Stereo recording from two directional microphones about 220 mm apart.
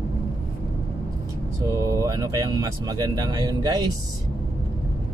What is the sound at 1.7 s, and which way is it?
Speech, 15° right (ahead or behind).